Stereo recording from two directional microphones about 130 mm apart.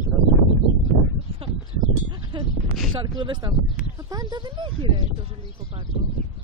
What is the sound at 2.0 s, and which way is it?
Speech, 35° right (ahead or behind).